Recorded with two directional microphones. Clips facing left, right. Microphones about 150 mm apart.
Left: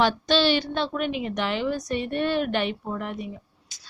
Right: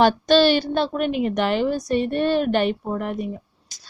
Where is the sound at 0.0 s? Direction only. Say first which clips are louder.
Right 6 dB; 45° right (ahead or behind).